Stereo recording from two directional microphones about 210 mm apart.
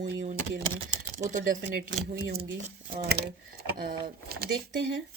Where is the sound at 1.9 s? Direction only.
50° right (ahead or behind).